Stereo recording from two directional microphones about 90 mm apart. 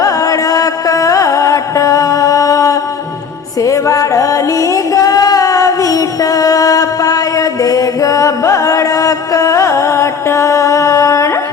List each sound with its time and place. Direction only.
0.0 s music: 40° left (ahead or behind)